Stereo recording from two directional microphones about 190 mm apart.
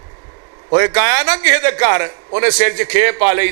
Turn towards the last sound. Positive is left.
turn(degrees=-20)  # may be behind; listen again after turning